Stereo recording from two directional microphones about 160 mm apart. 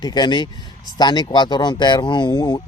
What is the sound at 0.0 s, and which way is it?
Speech, 25° left (ahead or behind).